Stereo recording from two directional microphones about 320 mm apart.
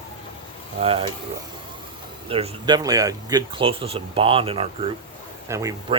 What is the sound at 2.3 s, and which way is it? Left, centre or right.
Speech, centre.